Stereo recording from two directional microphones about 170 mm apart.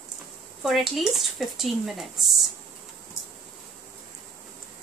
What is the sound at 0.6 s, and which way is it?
Speech, centre (ahead or behind).